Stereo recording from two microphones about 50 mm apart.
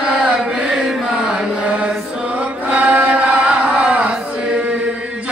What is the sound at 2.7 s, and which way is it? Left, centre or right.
Chant, right.